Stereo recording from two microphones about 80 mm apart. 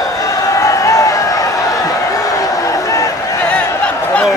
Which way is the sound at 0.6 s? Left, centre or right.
Left.